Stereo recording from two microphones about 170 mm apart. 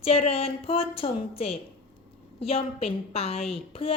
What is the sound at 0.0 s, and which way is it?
A woman's voice, 35° left (ahead or behind).